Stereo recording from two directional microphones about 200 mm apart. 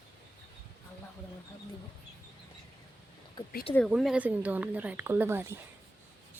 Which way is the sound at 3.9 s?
5° right (ahead or behind).